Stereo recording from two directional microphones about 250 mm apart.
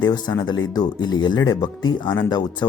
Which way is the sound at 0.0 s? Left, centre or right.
Centre.